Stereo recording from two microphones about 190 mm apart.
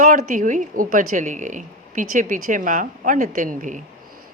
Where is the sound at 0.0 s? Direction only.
40° right (ahead or behind).